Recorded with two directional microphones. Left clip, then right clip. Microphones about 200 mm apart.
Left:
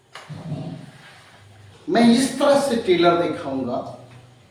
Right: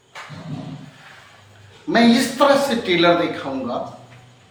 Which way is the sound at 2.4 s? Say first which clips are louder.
Right 2 dB; 10° right (ahead or behind).